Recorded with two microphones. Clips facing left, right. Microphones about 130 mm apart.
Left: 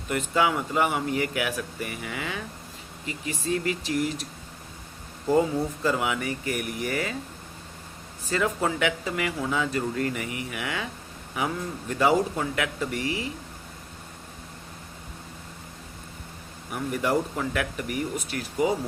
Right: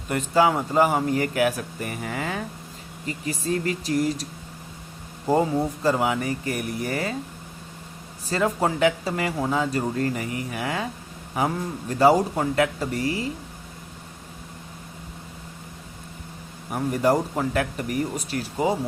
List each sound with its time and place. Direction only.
0.1 s speech: 35° right (ahead or behind)
5.8 s speech: 35° right (ahead or behind)
8.2 s speech: 35° right (ahead or behind)
16.7 s speech: 40° right (ahead or behind)